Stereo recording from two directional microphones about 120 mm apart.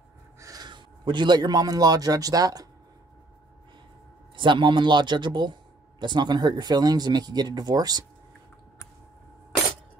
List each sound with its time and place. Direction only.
0.4 s a man's voice: 30° right (ahead or behind)
4.4 s a man's voice: 40° right (ahead or behind)